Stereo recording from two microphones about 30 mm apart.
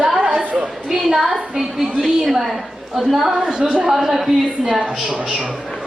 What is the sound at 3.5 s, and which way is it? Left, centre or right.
Speech, right.